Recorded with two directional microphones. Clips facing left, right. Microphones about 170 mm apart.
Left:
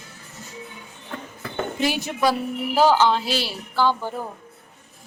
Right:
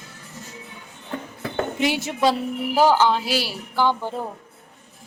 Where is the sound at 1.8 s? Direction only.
20° right (ahead or behind).